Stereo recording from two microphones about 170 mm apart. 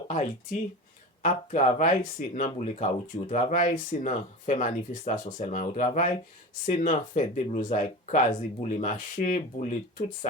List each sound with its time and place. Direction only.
0.1 s speech: 45° left (ahead or behind)